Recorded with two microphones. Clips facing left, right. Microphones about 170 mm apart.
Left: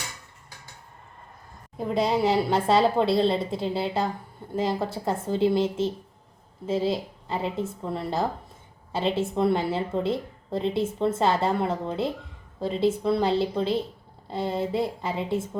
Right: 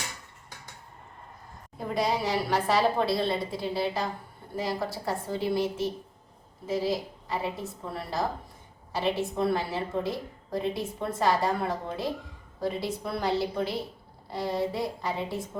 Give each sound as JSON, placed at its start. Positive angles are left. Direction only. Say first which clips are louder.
{"t": 2.0, "sound": "a woman's voice", "louder": "left 5 dB", "side_deg": 25}